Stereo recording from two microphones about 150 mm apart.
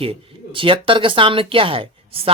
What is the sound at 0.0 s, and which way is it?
Speech, 40° right (ahead or behind).